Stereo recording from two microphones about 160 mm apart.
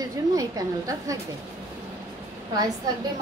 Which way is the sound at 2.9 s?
25° right (ahead or behind).